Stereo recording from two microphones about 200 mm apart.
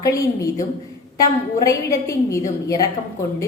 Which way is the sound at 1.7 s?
15° left (ahead or behind).